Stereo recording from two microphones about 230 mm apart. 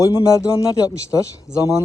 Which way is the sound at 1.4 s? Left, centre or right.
Centre.